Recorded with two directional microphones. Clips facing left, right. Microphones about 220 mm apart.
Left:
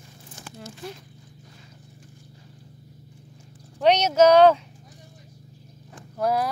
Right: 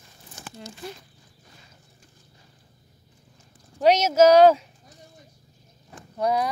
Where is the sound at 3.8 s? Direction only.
5° right (ahead or behind).